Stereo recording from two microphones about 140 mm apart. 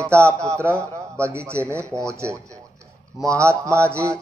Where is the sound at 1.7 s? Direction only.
20° right (ahead or behind).